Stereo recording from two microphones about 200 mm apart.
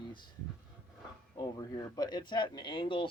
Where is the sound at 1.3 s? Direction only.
20° left (ahead or behind).